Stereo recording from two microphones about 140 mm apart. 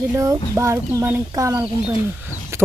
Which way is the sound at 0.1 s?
20° right (ahead or behind).